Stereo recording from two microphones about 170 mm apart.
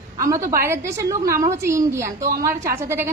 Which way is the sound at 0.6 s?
15° right (ahead or behind).